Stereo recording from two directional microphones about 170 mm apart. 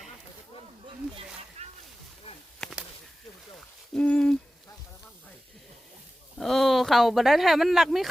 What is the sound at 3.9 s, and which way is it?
Owl, 5° left (ahead or behind).